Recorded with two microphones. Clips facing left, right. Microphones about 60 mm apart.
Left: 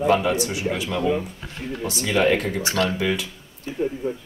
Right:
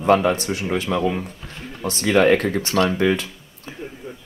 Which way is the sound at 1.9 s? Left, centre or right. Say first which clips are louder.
Right 4 dB; right.